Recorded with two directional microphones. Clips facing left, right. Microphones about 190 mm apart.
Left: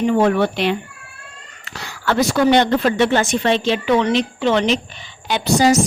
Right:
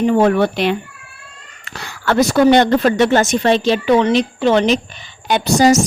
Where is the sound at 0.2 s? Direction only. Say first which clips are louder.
Right 2 dB; 45° right (ahead or behind).